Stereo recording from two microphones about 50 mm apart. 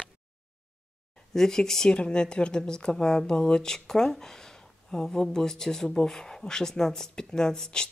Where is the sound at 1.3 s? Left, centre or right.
Centre.